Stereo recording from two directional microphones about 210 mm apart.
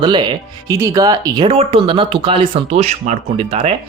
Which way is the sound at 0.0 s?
20° right (ahead or behind).